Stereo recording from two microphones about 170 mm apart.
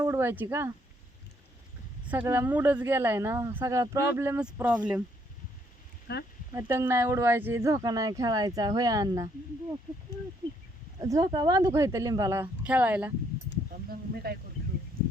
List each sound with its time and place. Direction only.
0.0 s speech: 15° right (ahead or behind)
2.0 s speech: 15° right (ahead or behind)
6.1 s speech: 65° left (ahead or behind)
6.5 s speech: 15° right (ahead or behind)
11.0 s speech: 20° right (ahead or behind)
13.9 s speech: 65° right (ahead or behind)